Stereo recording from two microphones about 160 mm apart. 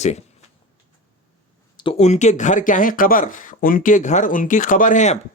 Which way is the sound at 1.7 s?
30° left (ahead or behind).